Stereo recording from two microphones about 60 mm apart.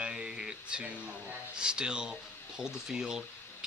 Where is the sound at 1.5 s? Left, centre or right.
Centre.